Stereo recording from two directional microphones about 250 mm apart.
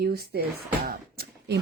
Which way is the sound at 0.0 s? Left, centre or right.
Right.